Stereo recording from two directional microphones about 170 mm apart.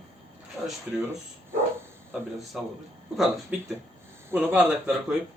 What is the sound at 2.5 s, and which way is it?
Speech, 5° right (ahead or behind).